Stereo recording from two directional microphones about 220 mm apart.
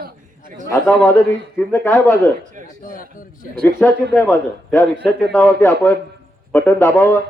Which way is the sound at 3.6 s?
5° left (ahead or behind).